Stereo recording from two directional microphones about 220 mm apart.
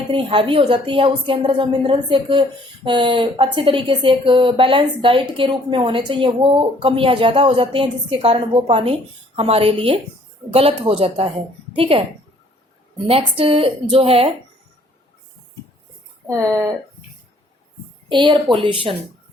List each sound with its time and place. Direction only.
0.1 s a woman's voice: 25° right (ahead or behind)
13.1 s a woman's voice: 25° right (ahead or behind)
16.2 s speech: 15° right (ahead or behind)
18.1 s a woman's voice: 20° right (ahead or behind)